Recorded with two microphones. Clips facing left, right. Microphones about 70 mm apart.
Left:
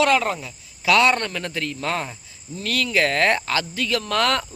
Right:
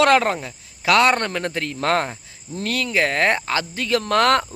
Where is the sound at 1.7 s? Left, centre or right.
Right.